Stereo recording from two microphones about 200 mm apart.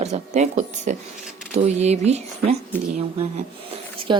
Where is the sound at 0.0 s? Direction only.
35° right (ahead or behind).